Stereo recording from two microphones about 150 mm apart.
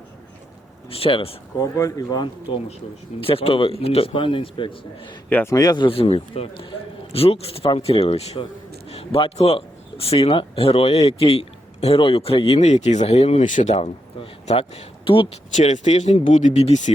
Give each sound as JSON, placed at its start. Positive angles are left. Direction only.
{"t": 0.9, "sound": "speech", "side_deg": 40}
{"t": 1.5, "sound": "speech", "side_deg": 20}
{"t": 5.3, "sound": "a man's voice", "side_deg": 15}
{"t": 5.5, "sound": "speech", "side_deg": 30}
{"t": 15.5, "sound": "speech", "side_deg": 50}